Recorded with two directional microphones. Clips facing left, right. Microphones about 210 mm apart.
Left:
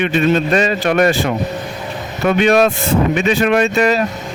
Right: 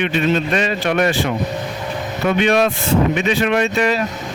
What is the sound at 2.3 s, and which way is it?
A man's voice, 45° left (ahead or behind).